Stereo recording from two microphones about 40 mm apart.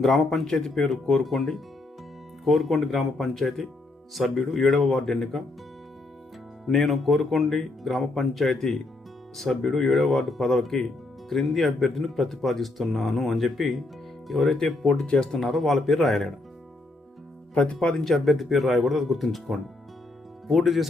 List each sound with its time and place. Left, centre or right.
0.0 s speech: centre
1.2 s speech: centre
6.7 s speech: centre
15.0 s speech: left
15.4 s speech: centre
17.5 s speech: left
18.0 s speech: centre